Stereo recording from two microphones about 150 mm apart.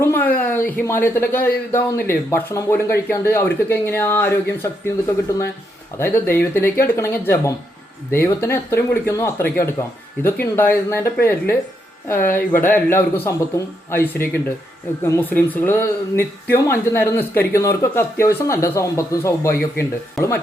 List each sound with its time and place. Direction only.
0.0 s speech: 15° left (ahead or behind)